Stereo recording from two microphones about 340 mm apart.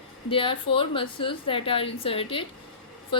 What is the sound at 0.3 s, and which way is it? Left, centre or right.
Speech, centre.